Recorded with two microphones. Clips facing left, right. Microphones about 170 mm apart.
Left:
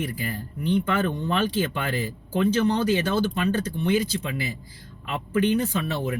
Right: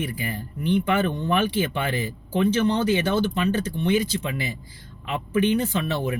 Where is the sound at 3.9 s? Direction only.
35° left (ahead or behind).